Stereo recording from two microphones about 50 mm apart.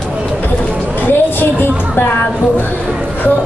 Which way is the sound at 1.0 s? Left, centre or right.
Left.